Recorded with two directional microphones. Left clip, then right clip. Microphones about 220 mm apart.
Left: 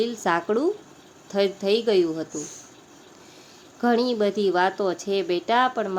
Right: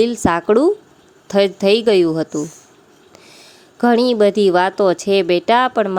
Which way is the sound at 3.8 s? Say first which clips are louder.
Right 9 dB; 40° right (ahead or behind).